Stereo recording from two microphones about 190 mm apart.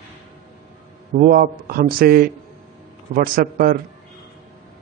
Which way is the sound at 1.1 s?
45° right (ahead or behind).